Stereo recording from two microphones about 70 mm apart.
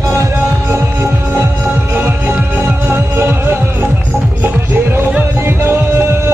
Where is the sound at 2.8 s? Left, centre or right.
Right.